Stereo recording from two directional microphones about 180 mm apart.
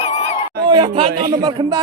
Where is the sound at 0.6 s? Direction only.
25° right (ahead or behind).